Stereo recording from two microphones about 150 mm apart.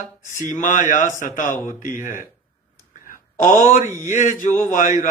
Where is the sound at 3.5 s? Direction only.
55° left (ahead or behind).